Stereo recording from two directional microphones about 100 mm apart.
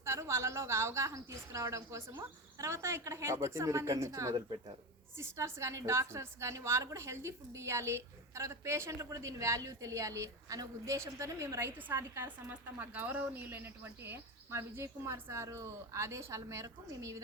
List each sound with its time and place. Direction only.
0.0 s a woman's voice: 25° right (ahead or behind)